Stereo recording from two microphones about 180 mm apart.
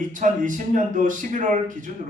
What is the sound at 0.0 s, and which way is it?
A man's voice, 45° right (ahead or behind).